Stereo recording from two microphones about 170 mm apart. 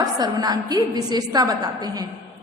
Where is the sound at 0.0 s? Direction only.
25° right (ahead or behind).